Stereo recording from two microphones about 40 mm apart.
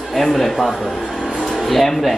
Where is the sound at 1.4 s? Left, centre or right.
Centre.